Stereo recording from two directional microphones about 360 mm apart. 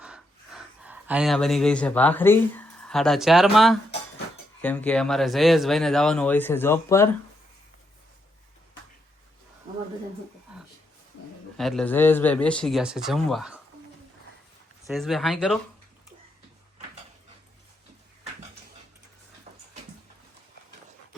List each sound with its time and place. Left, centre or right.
0.0 s speech: centre
11.5 s speech: centre
14.8 s speech: centre
19.5 s a sound: centre